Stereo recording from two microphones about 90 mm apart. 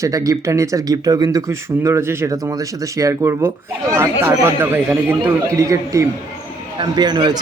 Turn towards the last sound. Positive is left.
turn(degrees=-55)  # may be behind; listen again after turning